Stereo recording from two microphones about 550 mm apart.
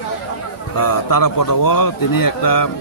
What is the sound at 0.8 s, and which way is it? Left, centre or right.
Speech, left.